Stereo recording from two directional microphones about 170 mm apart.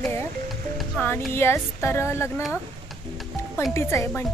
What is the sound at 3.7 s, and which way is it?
Speech, 15° left (ahead or behind).